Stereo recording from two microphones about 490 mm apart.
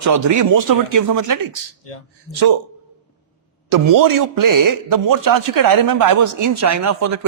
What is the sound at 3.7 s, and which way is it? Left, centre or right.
A man's voice, right.